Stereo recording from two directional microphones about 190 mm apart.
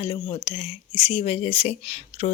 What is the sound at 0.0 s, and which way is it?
Speech, 30° left (ahead or behind).